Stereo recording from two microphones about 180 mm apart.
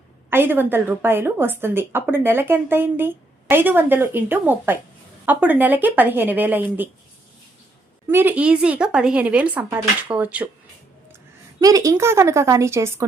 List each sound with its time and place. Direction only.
0.3 s a woman's voice: 10° right (ahead or behind)
8.1 s a woman's voice: 10° right (ahead or behind)
11.6 s a woman's voice: 20° right (ahead or behind)